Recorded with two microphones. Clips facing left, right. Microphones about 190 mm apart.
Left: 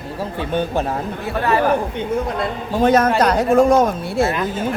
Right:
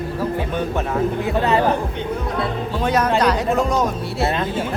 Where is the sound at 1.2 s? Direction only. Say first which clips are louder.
Left 3 dB; 20° right (ahead or behind).